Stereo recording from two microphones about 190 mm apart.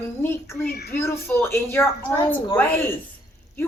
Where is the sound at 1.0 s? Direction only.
10° left (ahead or behind).